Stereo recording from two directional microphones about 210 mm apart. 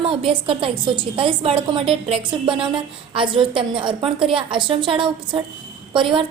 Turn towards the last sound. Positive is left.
turn(degrees=-25)  # may be behind; listen again after turning